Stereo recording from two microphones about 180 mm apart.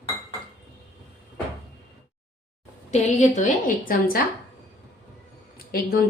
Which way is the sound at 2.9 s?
40° left (ahead or behind).